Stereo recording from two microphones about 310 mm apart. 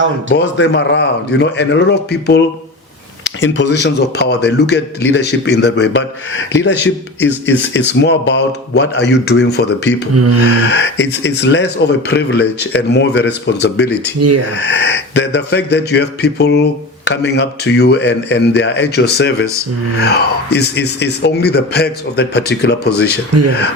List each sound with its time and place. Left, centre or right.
0.3 s speech: left
3.4 s speech: left
10.2 s speech: right
10.5 s speech: left
14.2 s speech: right
14.5 s speech: left